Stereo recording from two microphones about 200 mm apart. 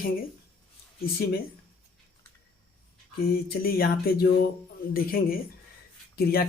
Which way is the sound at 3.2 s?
50° left (ahead or behind).